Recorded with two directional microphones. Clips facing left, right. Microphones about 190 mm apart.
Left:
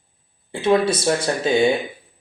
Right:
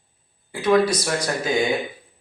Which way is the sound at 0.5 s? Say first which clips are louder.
Even; 25° left (ahead or behind).